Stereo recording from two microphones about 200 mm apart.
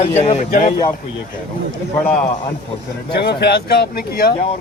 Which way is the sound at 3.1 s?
55° left (ahead or behind).